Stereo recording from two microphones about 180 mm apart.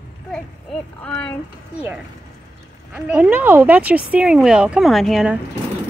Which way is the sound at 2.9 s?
5° right (ahead or behind).